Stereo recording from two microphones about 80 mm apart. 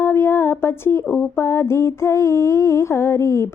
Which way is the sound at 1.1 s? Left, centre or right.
Left.